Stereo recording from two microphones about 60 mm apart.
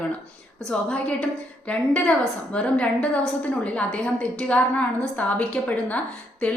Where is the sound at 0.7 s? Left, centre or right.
Centre.